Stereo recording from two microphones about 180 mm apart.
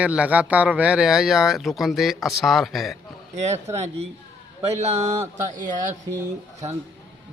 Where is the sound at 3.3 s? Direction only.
40° right (ahead or behind).